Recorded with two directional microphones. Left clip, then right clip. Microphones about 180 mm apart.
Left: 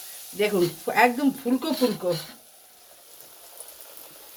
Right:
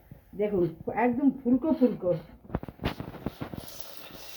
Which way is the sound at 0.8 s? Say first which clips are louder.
Left 10 dB; 10° left (ahead or behind).